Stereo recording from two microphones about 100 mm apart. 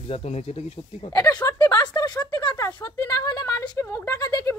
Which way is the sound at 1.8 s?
45° left (ahead or behind).